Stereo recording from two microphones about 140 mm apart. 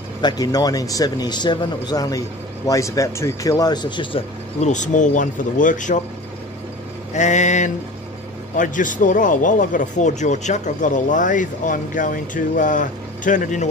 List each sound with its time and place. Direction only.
0.2 s speech: 30° left (ahead or behind)
4.6 s speech: 60° left (ahead or behind)
7.2 s a man's voice: 60° left (ahead or behind)